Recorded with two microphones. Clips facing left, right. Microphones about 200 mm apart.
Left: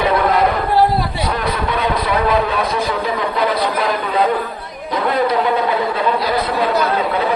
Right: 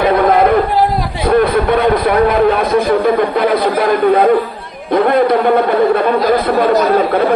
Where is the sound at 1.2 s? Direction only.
55° right (ahead or behind).